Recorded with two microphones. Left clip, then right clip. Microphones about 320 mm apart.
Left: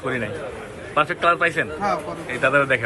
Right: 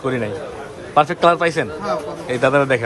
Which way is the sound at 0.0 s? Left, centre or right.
Centre.